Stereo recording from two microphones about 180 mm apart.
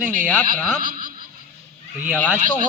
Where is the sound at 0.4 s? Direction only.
50° right (ahead or behind).